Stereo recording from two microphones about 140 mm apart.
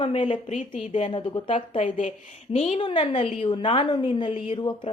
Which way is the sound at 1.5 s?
60° left (ahead or behind).